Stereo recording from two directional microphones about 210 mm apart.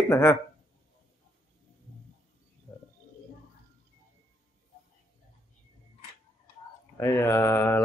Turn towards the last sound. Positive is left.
turn(degrees=10)  # may be behind; listen again after turning